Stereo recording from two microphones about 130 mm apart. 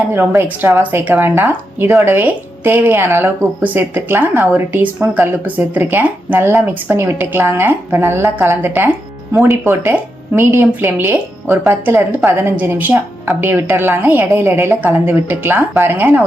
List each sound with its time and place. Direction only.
0.1 s speech: 15° right (ahead or behind)